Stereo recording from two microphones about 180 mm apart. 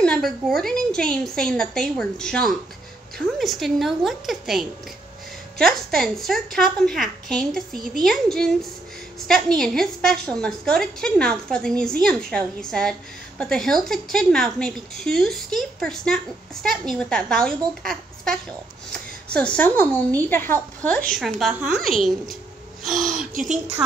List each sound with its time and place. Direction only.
0.0 s a woman's voice: 5° left (ahead or behind)
23.3 s speech: 45° right (ahead or behind)